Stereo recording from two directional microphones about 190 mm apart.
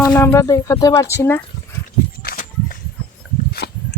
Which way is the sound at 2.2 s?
50° left (ahead or behind).